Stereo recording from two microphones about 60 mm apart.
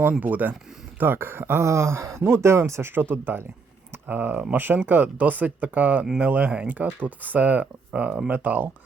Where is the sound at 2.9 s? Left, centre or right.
Right.